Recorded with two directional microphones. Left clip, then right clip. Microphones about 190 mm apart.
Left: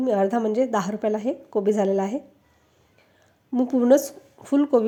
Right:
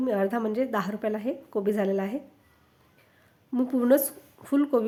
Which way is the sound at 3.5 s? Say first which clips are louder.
Left 4 dB; 10° left (ahead or behind).